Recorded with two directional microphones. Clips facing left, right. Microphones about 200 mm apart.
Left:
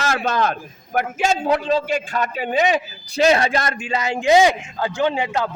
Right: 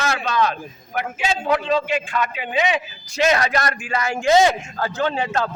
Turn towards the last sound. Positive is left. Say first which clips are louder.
# left 1 dB
turn(degrees=15)  # may be behind; listen again after turning